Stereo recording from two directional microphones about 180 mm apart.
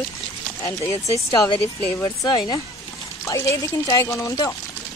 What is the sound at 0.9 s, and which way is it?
Speech, 35° left (ahead or behind).